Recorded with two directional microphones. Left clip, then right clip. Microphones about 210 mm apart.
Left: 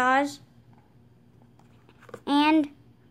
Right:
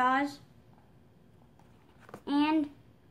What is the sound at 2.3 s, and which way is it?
Speech, 45° left (ahead or behind).